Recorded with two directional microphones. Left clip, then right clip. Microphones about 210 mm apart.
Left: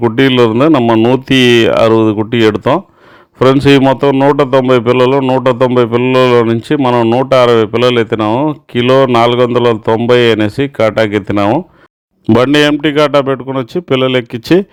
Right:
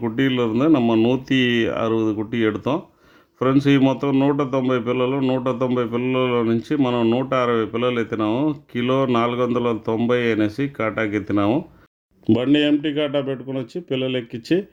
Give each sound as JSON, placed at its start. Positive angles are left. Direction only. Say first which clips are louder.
{"t": 0.0, "sound": "speech", "louder": "left 12 dB", "side_deg": 35}
{"t": 4.1, "sound": "speech", "louder": "left 11 dB", "side_deg": 25}
{"t": 12.3, "sound": "a man's voice", "louder": "left 10 dB", "side_deg": 45}